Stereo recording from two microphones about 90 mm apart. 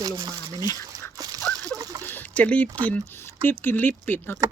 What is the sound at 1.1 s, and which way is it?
Dog, 45° right (ahead or behind).